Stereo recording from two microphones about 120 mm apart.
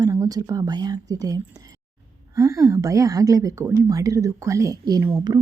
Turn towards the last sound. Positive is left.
turn(degrees=-30)  # may be behind; listen again after turning